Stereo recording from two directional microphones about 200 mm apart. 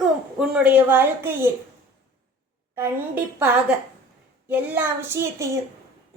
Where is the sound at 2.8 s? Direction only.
10° right (ahead or behind).